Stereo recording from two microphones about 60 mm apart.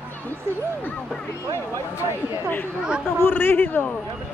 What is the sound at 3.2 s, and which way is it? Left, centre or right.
Speech, left.